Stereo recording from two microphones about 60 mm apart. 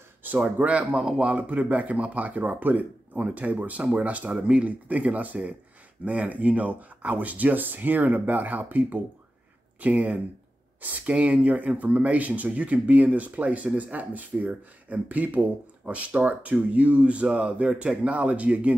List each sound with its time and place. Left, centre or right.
0.2 s speech: right
1.0 s speech: centre
1.3 s speech: right